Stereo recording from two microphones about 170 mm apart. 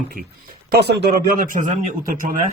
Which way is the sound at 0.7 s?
75° right (ahead or behind).